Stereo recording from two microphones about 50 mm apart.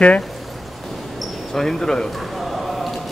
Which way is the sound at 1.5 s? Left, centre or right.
Centre.